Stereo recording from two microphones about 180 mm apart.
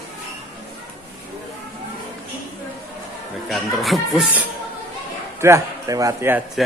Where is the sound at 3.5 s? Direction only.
Centre (ahead or behind).